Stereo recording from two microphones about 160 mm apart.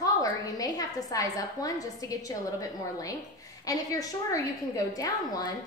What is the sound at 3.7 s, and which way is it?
A woman's voice, 20° left (ahead or behind).